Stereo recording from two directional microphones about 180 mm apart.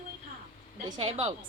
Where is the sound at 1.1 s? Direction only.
35° right (ahead or behind).